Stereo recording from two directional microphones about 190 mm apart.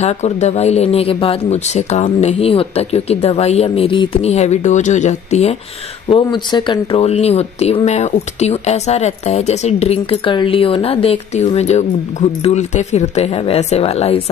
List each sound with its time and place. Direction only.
0.0 s speech: 35° left (ahead or behind)